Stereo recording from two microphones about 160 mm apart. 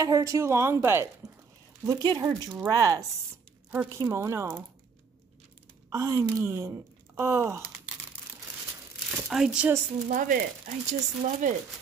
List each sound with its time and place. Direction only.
0.0 s speech: 20° right (ahead or behind)
1.2 s a sound: 5° right (ahead or behind)
1.9 s a woman's voice: 25° right (ahead or behind)
5.9 s a woman's voice: 20° right (ahead or behind)
7.2 s a sound: 15° right (ahead or behind)
9.1 s speech: 5° right (ahead or behind)
10.0 s sizzle: 55° right (ahead or behind)
10.9 s speech: 50° right (ahead or behind)